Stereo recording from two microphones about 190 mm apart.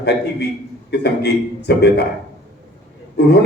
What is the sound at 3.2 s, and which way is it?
Speech, 60° left (ahead or behind).